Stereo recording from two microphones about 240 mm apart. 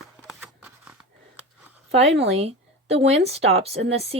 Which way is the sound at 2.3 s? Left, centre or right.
Right.